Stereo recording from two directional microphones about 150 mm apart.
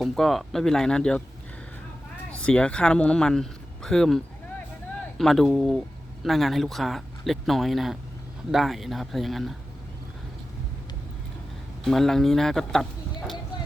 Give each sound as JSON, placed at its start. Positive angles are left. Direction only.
{"t": 0.0, "sound": "speech", "side_deg": 0}
{"t": 2.4, "sound": "speech", "side_deg": 5}
{"t": 11.9, "sound": "speech", "side_deg": 0}